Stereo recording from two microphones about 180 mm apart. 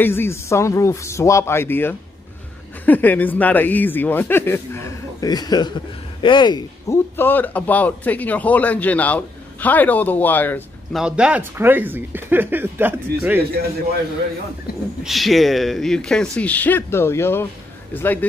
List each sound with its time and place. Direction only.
0.0 s a man's voice: 10° left (ahead or behind)
7.2 s a man's voice: 10° left (ahead or behind)
11.0 s speech: 5° right (ahead or behind)
14.7 s speech: 60° left (ahead or behind)
15.0 s a man's voice: centre (ahead or behind)